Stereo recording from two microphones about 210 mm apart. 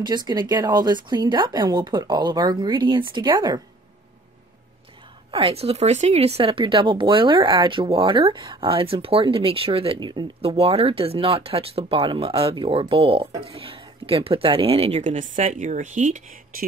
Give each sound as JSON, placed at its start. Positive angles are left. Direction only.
{"t": 0.0, "sound": "speech", "side_deg": -20}
{"t": 5.3, "sound": "speech", "side_deg": -30}